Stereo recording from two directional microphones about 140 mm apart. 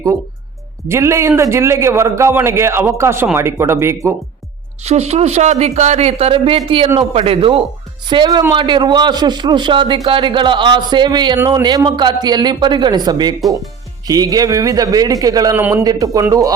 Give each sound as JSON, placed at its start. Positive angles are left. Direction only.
{"t": 0.9, "sound": "a man's voice", "side_deg": -20}
{"t": 4.9, "sound": "a woman's voice", "side_deg": -50}
{"t": 15.5, "sound": "a man's voice", "side_deg": -15}
{"t": 15.8, "sound": "a man's voice", "side_deg": -25}